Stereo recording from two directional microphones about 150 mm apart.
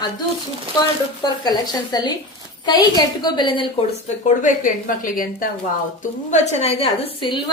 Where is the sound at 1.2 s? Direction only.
25° left (ahead or behind).